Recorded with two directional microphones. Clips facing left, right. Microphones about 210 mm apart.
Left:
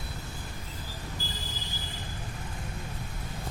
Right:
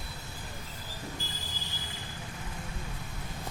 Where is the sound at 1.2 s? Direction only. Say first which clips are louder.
Left 3 dB; 35° left (ahead or behind).